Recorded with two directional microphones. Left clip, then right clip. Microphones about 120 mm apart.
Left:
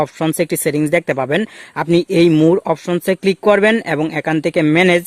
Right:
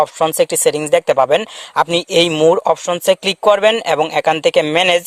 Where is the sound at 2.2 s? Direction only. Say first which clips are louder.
Left 1 dB; 20° right (ahead or behind).